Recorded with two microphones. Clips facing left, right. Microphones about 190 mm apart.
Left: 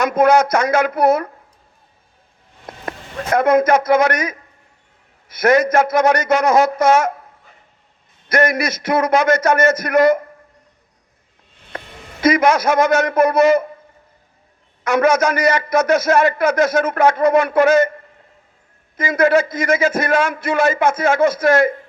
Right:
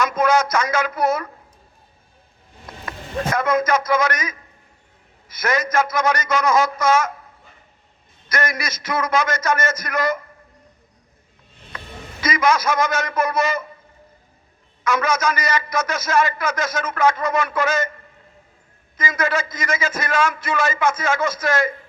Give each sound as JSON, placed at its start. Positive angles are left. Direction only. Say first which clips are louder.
{"t": 0.0, "sound": "a man's voice", "louder": "left 5 dB", "side_deg": 60}
{"t": 3.3, "sound": "a man's voice", "louder": "left 7 dB", "side_deg": 60}
{"t": 8.3, "sound": "a man's voice", "louder": "left 8 dB", "side_deg": 60}
{"t": 12.2, "sound": "a man's voice", "louder": "left 5 dB", "side_deg": 60}
{"t": 14.8, "sound": "a man's voice", "louder": "left 6 dB", "side_deg": 65}
{"t": 18.9, "sound": "a man's voice", "louder": "left 8 dB", "side_deg": 60}